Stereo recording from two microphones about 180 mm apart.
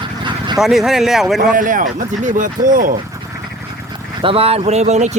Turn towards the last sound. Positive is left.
turn(degrees=-40)  # may be behind; listen again after turning